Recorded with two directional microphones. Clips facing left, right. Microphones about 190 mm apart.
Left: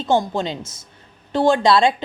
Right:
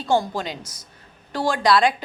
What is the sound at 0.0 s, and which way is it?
Speech, 25° left (ahead or behind).